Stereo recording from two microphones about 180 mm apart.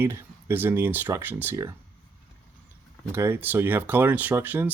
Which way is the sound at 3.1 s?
15° right (ahead or behind).